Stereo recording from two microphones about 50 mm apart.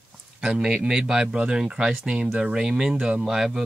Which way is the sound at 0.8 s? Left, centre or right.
Centre.